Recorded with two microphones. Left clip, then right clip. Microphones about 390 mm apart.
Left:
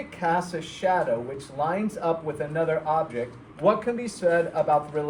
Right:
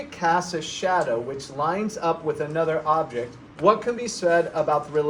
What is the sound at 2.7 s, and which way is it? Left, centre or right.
Speech, centre.